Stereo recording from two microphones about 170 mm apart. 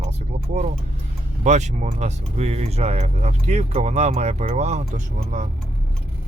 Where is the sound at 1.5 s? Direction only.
40° right (ahead or behind).